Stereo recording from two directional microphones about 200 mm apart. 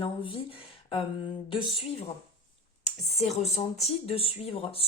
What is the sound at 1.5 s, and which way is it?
Speech, 25° left (ahead or behind).